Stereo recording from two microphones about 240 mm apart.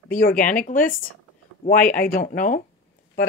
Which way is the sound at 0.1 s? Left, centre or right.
Left.